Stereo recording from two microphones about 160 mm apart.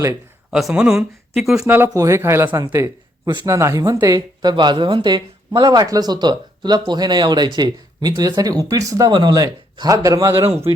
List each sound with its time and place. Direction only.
0.5 s speech: 5° right (ahead or behind)
1.5 s speech: 15° right (ahead or behind)